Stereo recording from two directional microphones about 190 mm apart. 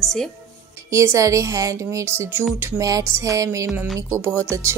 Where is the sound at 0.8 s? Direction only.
15° right (ahead or behind).